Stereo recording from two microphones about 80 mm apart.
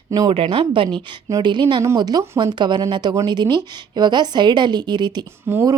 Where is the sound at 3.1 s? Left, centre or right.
Right.